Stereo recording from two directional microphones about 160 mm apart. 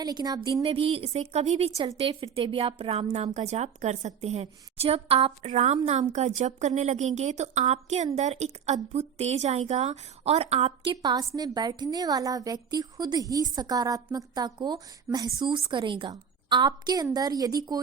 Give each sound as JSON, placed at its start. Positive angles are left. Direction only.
{"t": 0.0, "sound": "a woman's voice", "side_deg": -25}
{"t": 0.6, "sound": "a woman's voice", "side_deg": -35}
{"t": 11.0, "sound": "a woman's voice", "side_deg": -25}